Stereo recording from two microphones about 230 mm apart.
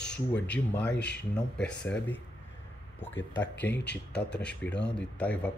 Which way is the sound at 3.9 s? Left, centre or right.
Left.